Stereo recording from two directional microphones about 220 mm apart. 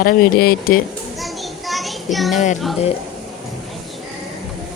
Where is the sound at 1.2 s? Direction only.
Centre (ahead or behind).